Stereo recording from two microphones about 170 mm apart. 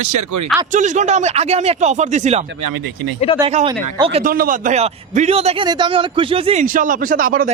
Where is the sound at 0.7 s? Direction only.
45° right (ahead or behind).